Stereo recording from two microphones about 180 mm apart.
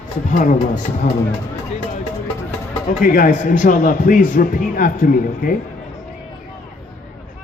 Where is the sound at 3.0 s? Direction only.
50° left (ahead or behind).